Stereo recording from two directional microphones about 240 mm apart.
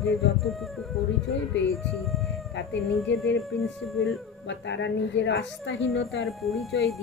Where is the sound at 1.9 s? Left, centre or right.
Centre.